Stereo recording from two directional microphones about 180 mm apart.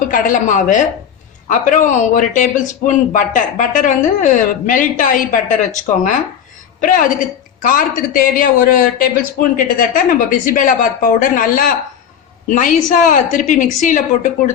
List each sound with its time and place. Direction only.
0.1 s a man's voice: 45° left (ahead or behind)
6.8 s a man's voice: 50° left (ahead or behind)